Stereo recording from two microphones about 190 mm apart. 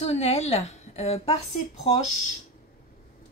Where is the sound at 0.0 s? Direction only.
35° left (ahead or behind).